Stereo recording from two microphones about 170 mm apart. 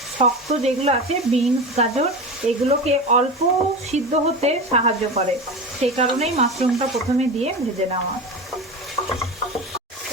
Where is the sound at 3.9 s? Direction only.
40° right (ahead or behind).